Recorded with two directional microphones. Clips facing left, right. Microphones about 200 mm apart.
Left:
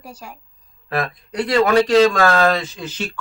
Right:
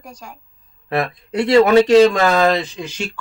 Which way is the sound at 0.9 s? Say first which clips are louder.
Right 3 dB; 25° right (ahead or behind).